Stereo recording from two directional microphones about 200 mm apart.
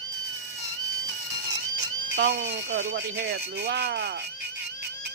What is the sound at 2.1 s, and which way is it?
Speech, 65° right (ahead or behind).